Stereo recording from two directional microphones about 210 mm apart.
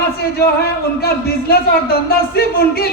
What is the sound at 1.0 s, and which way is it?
A man's voice, 50° left (ahead or behind).